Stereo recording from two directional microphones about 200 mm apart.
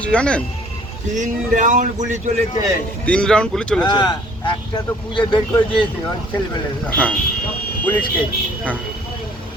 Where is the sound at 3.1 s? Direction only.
5° left (ahead or behind).